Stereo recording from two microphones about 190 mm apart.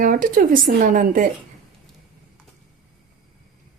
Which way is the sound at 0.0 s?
45° right (ahead or behind).